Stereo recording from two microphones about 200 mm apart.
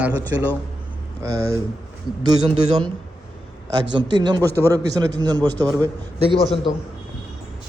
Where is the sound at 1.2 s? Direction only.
15° right (ahead or behind).